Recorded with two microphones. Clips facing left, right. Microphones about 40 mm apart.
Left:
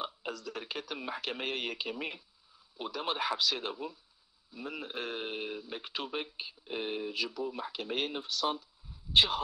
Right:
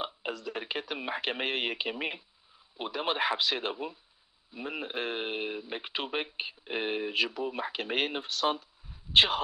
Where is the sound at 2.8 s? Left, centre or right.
Right.